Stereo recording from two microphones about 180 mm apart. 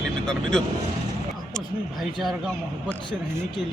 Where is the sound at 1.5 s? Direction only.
5° left (ahead or behind).